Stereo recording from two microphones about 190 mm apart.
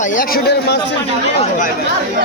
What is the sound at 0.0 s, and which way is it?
Speech, 45° left (ahead or behind).